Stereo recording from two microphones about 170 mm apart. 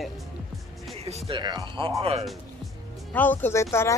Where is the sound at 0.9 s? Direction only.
35° right (ahead or behind).